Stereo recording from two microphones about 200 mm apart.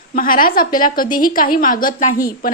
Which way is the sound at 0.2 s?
45° left (ahead or behind).